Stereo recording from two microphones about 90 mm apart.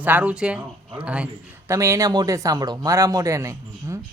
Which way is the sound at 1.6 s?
35° right (ahead or behind).